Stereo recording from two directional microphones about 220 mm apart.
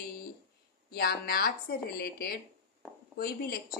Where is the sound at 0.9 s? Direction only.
45° left (ahead or behind).